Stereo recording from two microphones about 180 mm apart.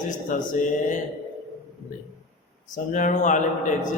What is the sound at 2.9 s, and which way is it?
Speech, 45° left (ahead or behind).